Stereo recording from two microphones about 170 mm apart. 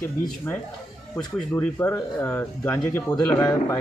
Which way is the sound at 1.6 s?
15° left (ahead or behind).